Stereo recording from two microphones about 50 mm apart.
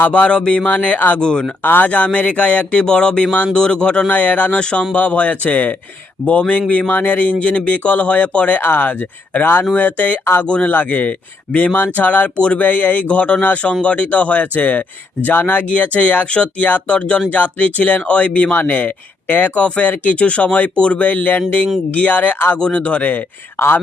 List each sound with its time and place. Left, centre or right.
0.1 s speech: left
1.2 s speech: centre
1.6 s speech: left
4.1 s speech: left
4.5 s speech: centre
4.9 s speech: left
8.6 s speech: left
10.7 s speech: left
17.3 s speech: left
22.5 s speech: left
23.6 s speech: left